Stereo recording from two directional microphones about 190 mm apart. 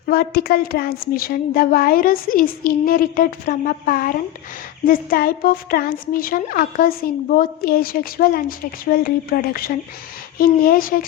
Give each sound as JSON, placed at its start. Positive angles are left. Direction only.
{"t": 0.0, "sound": "a woman's voice", "side_deg": 55}